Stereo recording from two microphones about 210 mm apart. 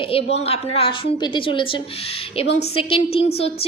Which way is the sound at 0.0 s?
25° left (ahead or behind).